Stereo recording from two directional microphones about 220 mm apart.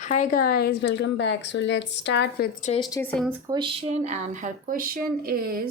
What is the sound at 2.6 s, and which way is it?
Speech, 30° left (ahead or behind).